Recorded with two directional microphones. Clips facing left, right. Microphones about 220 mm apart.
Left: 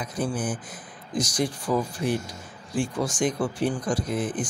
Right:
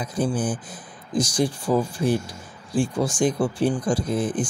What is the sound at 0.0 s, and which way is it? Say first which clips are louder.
Speech: right 4 dB; 30° right (ahead or behind).